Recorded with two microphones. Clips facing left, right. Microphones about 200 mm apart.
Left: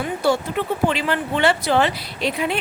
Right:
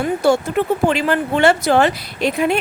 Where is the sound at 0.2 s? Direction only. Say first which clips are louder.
Right 4 dB; 45° right (ahead or behind).